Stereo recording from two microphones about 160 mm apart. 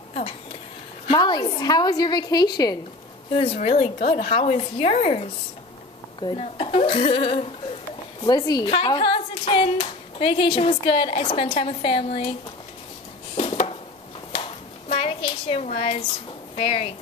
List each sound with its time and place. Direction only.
0.1 s speech: 40° left (ahead or behind)
1.0 s a woman's voice: 30° left (ahead or behind)
3.5 s speech: 40° left (ahead or behind)
8.3 s speech: 25° left (ahead or behind)
13.4 s a sound: 35° left (ahead or behind)
14.9 s a woman's voice: 35° left (ahead or behind)